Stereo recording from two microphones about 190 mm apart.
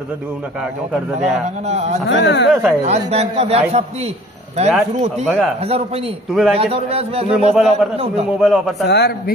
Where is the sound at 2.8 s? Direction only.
35° right (ahead or behind).